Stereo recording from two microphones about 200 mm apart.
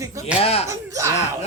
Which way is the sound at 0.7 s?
15° right (ahead or behind).